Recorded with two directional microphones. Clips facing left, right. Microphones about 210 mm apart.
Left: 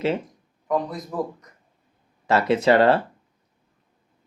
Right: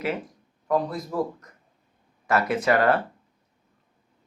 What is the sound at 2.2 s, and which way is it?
Speech, 25° left (ahead or behind).